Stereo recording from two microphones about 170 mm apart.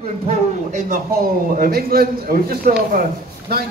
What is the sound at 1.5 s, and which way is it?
A man's voice, 60° right (ahead or behind).